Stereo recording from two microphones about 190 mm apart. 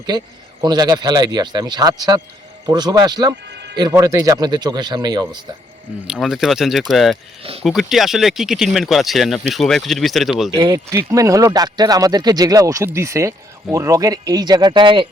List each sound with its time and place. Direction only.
0.1 s speech: 20° right (ahead or behind)
6.1 s speech: centre (ahead or behind)
10.6 s speech: 20° right (ahead or behind)